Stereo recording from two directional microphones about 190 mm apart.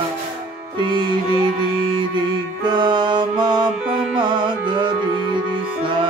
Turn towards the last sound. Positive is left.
turn(degrees=-25)  # may be behind; listen again after turning